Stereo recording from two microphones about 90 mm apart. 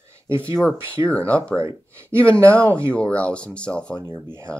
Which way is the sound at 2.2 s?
15° left (ahead or behind).